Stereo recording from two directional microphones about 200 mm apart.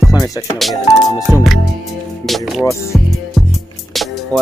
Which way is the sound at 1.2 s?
Centre (ahead or behind).